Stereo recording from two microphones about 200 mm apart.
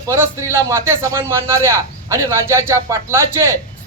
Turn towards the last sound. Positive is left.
turn(degrees=-15)  # may be behind; listen again after turning